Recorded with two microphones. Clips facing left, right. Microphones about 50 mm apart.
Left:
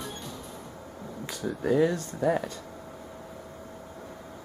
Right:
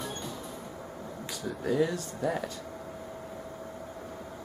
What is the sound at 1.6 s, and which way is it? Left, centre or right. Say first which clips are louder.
Speech: left 4 dB; centre.